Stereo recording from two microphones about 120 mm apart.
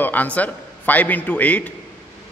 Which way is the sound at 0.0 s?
15° left (ahead or behind).